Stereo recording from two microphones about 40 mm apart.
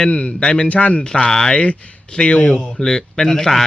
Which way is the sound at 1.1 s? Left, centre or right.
Centre.